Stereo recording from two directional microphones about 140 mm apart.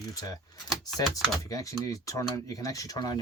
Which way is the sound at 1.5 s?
25° left (ahead or behind).